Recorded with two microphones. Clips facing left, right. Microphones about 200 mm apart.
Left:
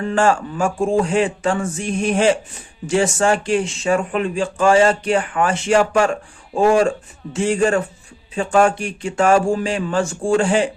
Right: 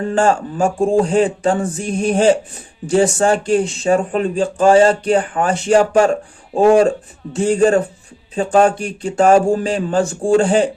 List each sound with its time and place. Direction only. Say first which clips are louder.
0.0 s speech: right 2 dB; 35° right (ahead or behind)